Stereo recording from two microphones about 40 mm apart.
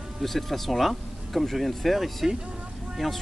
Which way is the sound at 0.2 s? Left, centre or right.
Centre.